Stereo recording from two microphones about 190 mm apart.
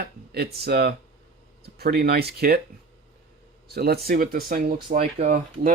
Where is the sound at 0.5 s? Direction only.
55° right (ahead or behind).